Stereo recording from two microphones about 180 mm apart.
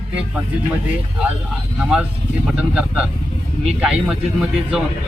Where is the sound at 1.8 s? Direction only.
5° right (ahead or behind).